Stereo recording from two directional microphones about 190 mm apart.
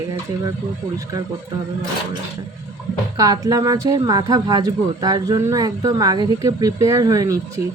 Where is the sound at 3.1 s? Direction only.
20° right (ahead or behind).